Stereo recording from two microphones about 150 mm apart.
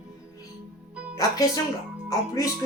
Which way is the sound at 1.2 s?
25° left (ahead or behind).